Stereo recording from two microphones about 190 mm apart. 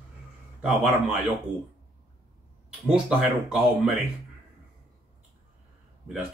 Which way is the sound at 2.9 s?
5° right (ahead or behind).